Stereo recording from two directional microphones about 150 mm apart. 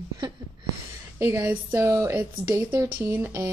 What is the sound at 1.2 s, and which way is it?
Speech, 15° right (ahead or behind).